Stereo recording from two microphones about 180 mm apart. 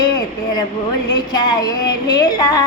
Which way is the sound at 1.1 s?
25° left (ahead or behind).